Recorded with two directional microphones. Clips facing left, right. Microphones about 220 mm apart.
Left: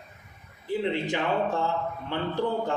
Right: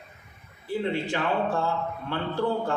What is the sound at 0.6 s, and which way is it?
A man's voice, 15° left (ahead or behind).